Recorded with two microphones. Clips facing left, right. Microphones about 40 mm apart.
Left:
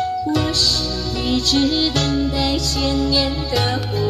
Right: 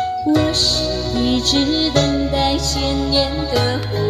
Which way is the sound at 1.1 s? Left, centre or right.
Right.